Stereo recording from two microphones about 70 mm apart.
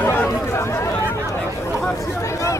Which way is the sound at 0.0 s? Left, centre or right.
Left.